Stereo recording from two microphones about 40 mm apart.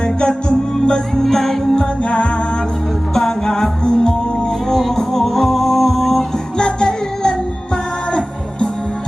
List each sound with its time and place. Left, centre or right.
0.0 s music: left
1.2 s music: centre
2.0 s music: left
3.2 s music: centre
6.6 s music: left